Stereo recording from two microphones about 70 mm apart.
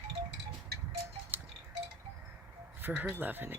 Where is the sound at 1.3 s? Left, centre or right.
Right.